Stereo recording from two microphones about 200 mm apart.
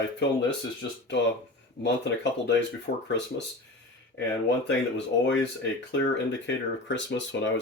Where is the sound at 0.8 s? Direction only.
65° left (ahead or behind).